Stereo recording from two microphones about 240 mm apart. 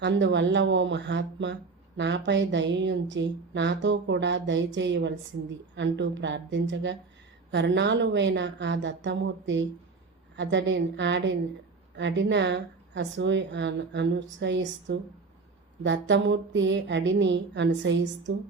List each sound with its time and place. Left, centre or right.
0.0 s speech: right